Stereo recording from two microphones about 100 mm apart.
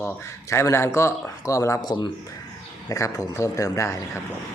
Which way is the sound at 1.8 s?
50° left (ahead or behind).